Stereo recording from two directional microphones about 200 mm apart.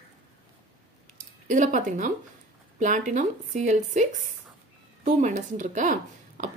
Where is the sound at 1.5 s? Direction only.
40° right (ahead or behind).